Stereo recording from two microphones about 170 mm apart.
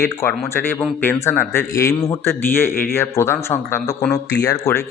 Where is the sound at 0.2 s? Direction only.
10° left (ahead or behind).